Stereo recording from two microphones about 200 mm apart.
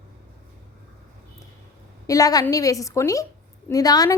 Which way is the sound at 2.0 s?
15° left (ahead or behind).